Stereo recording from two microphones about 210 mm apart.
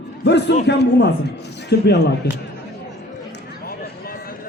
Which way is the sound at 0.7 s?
55° left (ahead or behind).